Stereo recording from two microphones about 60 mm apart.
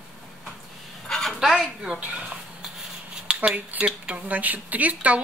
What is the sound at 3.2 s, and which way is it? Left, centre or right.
Speech, centre.